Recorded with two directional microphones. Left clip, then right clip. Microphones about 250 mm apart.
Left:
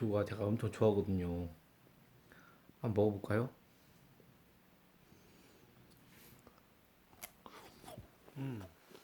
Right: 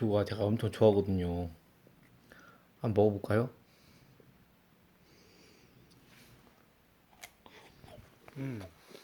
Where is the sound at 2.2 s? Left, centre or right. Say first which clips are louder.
Right 5 dB; centre.